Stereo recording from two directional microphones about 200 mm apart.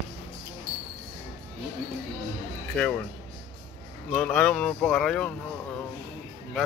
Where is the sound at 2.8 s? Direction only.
5° left (ahead or behind).